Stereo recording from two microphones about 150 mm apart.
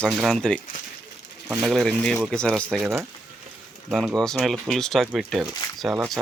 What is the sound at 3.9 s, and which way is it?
Speech, centre (ahead or behind).